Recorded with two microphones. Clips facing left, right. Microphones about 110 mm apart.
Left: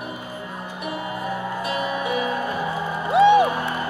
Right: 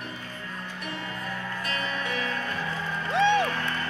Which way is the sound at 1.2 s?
15° left (ahead or behind).